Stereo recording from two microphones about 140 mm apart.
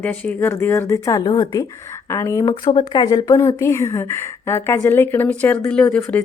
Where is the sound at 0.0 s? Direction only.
10° left (ahead or behind).